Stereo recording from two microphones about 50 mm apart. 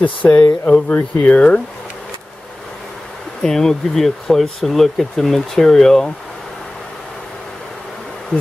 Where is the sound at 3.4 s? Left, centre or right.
Centre.